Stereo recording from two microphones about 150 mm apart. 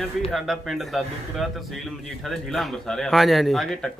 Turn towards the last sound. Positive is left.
turn(degrees=0)  # may be behind; listen again after turning